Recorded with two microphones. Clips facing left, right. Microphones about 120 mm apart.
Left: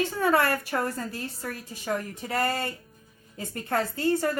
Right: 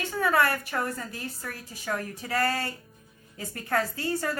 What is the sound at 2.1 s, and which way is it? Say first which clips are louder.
A woman's voice: even; 25° left (ahead or behind).